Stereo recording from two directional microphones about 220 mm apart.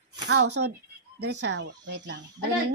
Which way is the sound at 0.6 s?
70° right (ahead or behind).